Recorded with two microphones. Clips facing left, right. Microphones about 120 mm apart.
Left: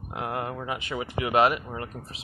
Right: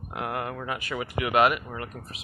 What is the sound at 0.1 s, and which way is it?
Speech, 25° left (ahead or behind).